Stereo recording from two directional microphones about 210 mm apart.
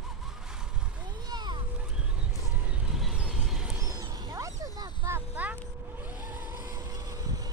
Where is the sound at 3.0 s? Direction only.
5° right (ahead or behind).